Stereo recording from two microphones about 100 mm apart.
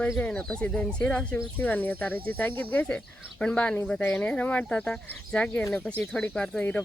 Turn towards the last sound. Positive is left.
turn(degrees=10)  # may be behind; listen again after turning